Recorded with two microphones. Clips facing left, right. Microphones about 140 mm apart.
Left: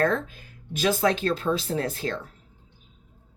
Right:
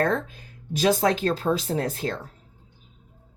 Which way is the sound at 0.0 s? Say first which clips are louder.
Even; 40° right (ahead or behind).